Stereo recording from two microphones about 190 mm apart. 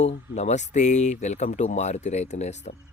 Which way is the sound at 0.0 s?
35° left (ahead or behind).